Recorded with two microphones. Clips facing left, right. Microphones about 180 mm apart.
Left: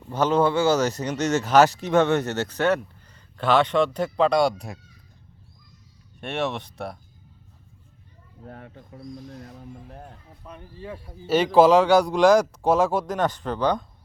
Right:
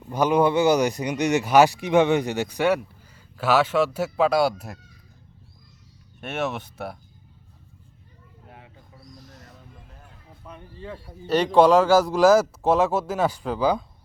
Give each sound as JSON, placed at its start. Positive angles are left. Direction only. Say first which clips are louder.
{"t": 0.1, "sound": "speech", "louder": "right 1 dB", "side_deg": -15}
{"t": 6.1, "sound": "speech", "louder": "left 1 dB", "side_deg": 0}
{"t": 8.4, "sound": "bird", "louder": "left 8 dB", "side_deg": 55}
{"t": 9.5, "sound": "a sound", "louder": "left 8 dB", "side_deg": 60}
{"t": 11.3, "sound": "speech", "louder": "left 1 dB", "side_deg": 0}